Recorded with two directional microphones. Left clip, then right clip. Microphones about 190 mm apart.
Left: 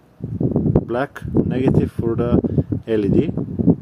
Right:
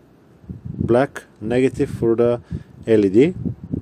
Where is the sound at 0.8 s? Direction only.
25° right (ahead or behind).